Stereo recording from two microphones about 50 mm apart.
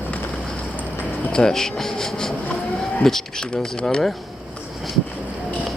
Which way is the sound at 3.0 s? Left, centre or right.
Centre.